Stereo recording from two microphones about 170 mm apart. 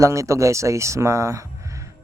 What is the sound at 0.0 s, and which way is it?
Speech, 15° right (ahead or behind).